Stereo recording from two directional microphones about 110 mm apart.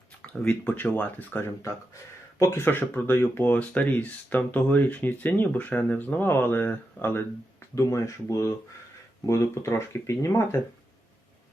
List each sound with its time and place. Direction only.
0.2 s speech: 15° left (ahead or behind)